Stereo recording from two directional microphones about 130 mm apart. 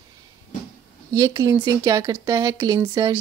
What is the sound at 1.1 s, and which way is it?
A woman's voice, 25° right (ahead or behind).